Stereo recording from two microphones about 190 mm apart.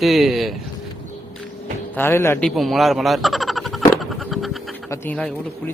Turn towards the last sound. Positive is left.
turn(degrees=10)  # may be behind; listen again after turning